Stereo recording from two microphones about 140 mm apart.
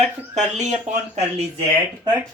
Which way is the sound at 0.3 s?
55° right (ahead or behind).